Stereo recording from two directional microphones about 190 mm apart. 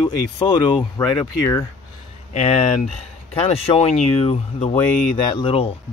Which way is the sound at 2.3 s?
35° left (ahead or behind).